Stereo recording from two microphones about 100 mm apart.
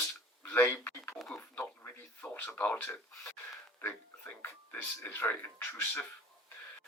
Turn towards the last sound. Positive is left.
turn(degrees=20)  # may be behind; listen again after turning